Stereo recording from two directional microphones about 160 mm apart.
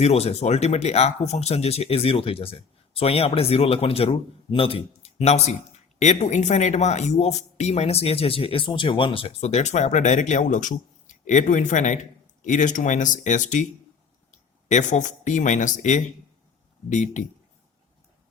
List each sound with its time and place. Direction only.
0.0 s speech: 40° left (ahead or behind)